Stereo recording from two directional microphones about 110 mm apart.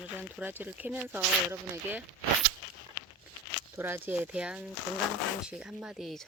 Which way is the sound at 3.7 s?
20° right (ahead or behind).